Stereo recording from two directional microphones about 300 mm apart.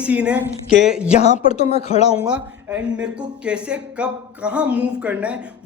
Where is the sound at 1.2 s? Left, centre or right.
Left.